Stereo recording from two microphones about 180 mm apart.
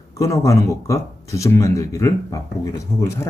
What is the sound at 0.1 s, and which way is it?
Speech, 15° left (ahead or behind).